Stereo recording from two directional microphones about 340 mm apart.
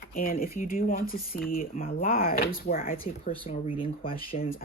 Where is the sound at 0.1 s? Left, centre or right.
Left.